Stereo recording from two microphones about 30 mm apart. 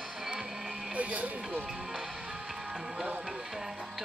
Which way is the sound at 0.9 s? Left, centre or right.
Right.